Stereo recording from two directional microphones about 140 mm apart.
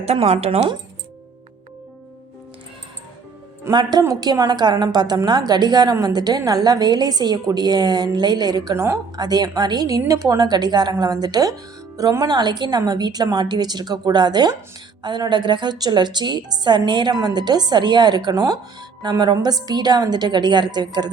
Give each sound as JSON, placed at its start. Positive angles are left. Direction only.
{"t": 0.0, "sound": "speech", "side_deg": -50}
{"t": 3.6, "sound": "a woman's voice", "side_deg": -30}